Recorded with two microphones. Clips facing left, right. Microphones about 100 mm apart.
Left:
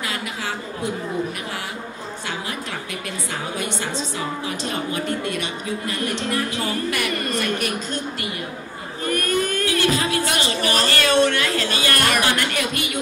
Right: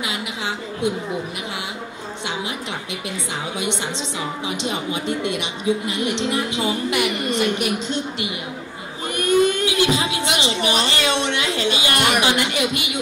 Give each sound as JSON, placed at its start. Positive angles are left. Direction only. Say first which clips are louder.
{"t": 4.2, "sound": "speech", "louder": "right 1 dB", "side_deg": -15}